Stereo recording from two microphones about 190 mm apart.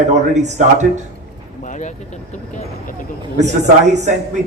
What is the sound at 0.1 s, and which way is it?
Speech, 40° right (ahead or behind).